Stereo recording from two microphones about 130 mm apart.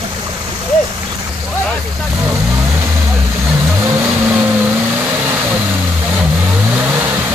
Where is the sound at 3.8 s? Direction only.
15° right (ahead or behind).